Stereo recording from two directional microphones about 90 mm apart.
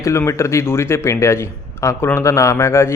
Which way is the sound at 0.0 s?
35° left (ahead or behind).